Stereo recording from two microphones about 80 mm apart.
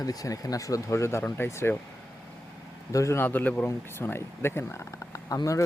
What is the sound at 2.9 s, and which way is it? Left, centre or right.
Speech, left.